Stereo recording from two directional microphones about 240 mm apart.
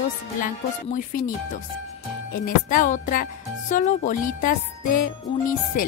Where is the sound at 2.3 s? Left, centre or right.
Left.